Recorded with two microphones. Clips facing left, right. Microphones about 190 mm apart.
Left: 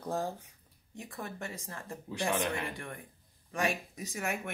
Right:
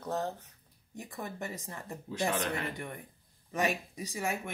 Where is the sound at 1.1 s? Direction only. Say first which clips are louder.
Right 2 dB; 20° right (ahead or behind).